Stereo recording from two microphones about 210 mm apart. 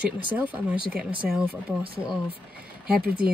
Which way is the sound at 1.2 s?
5° right (ahead or behind).